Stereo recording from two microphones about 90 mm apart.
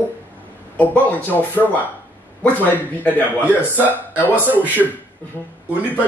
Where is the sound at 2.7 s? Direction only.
20° left (ahead or behind).